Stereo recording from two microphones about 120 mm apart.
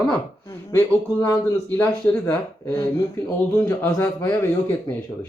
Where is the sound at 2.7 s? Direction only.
25° left (ahead or behind).